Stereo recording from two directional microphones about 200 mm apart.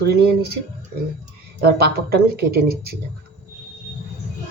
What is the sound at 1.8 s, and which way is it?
Speech, 50° right (ahead or behind).